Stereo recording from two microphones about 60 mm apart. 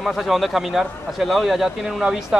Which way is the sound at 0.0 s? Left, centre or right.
Centre.